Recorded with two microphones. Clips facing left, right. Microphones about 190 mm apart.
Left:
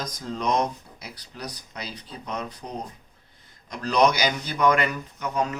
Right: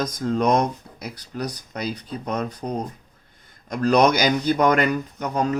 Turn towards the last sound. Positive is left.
turn(degrees=-40)  # may be behind; listen again after turning